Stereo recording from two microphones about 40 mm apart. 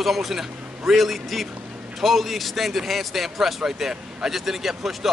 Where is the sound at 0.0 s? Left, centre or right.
Centre.